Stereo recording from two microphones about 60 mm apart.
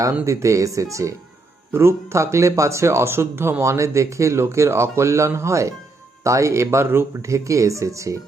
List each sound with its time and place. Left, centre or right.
0.3 s speech: right
1.7 s speech: right
3.6 s speech: right